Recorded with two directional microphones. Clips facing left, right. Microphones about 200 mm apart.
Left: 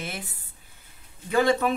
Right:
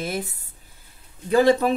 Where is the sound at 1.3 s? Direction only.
35° right (ahead or behind).